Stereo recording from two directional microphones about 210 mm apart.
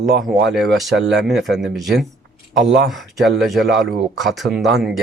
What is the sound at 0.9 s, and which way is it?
Speech, 55° right (ahead or behind).